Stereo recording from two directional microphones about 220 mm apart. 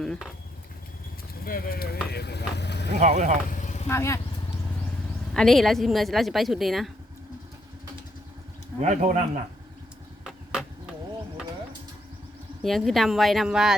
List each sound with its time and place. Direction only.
0.0 s speech: centre (ahead or behind)
1.5 s speech: 40° left (ahead or behind)
3.0 s speech: 35° right (ahead or behind)
3.5 s vehicle: 35° left (ahead or behind)
3.8 s speech: 10° left (ahead or behind)
5.3 s speech: centre (ahead or behind)
8.8 s speech: 35° right (ahead or behind)
10.5 s a sound: 5° right (ahead or behind)
12.6 s speech: centre (ahead or behind)